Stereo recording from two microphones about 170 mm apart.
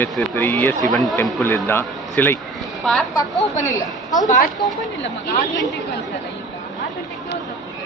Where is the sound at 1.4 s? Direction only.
15° left (ahead or behind).